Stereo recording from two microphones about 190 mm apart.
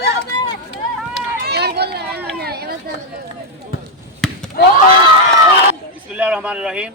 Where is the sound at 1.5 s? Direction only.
60° right (ahead or behind).